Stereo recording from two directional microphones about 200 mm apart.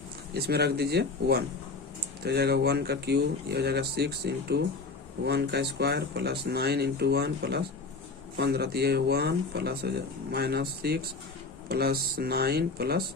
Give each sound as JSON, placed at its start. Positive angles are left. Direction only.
{"t": 0.3, "sound": "speech", "side_deg": -55}